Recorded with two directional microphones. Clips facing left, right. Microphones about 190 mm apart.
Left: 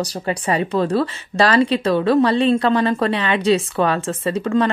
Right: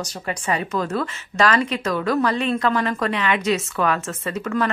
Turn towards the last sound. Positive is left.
turn(degrees=30)  # may be behind; listen again after turning